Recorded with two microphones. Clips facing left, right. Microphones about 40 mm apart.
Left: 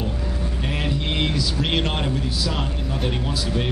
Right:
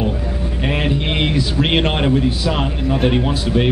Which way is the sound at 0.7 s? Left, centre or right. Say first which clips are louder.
Right 7 dB; right.